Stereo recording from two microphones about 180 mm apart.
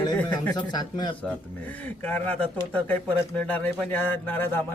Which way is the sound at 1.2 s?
10° left (ahead or behind).